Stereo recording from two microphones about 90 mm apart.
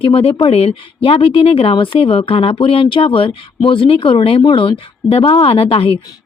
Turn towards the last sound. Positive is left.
turn(degrees=85)